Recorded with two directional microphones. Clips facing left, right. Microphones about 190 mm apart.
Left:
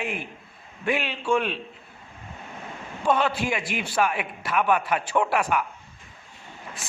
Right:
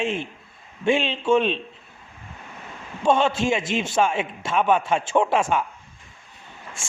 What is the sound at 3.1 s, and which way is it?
A man's voice, 25° right (ahead or behind).